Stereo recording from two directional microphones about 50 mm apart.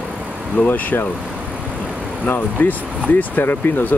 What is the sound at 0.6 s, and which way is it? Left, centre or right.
Speech, left.